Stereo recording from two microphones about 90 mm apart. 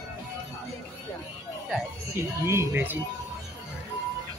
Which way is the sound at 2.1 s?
30° right (ahead or behind).